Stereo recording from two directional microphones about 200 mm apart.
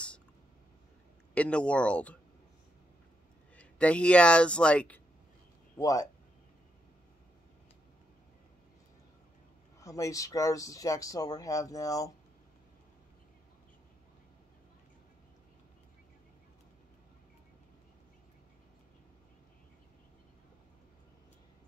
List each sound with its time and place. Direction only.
1.3 s speech: 5° left (ahead or behind)
3.5 s speech: 5° left (ahead or behind)
5.8 s speech: 15° left (ahead or behind)
9.8 s speech: 15° left (ahead or behind)